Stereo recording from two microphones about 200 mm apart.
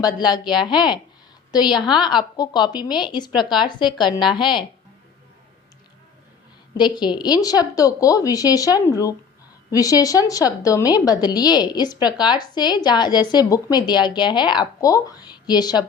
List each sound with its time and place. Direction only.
0.2 s a woman's voice: 20° left (ahead or behind)
6.7 s a woman's voice: 20° left (ahead or behind)